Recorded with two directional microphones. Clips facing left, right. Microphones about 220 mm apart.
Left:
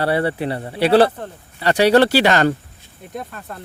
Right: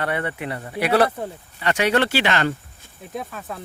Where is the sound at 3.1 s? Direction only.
Centre (ahead or behind).